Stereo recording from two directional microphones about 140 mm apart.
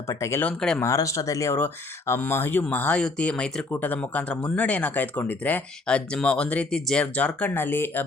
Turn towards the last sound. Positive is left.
turn(degrees=15)  # may be behind; listen again after turning